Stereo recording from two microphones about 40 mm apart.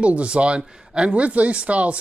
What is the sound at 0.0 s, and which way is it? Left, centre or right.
Speech, right.